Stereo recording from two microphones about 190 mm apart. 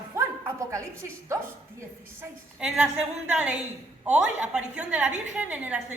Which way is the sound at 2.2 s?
5° right (ahead or behind).